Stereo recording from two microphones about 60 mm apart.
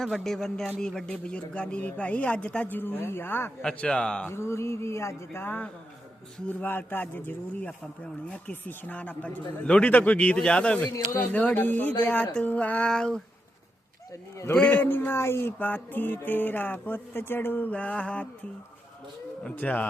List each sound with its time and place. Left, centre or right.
0.0 s a man's voice: centre
2.6 s music: left
3.8 s a man's voice: centre
4.3 s a sound: left
5.4 s music: left
7.7 s speech: centre
10.9 s speech: left
11.3 s speech: left
12.9 s a man's voice: centre
14.3 s a man's voice: left
14.7 s music: left
19.5 s speech: left